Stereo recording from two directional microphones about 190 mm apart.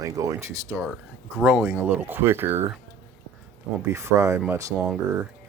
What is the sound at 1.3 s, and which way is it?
Speech, 5° right (ahead or behind).